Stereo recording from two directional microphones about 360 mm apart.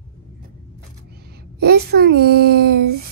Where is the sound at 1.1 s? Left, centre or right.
Right.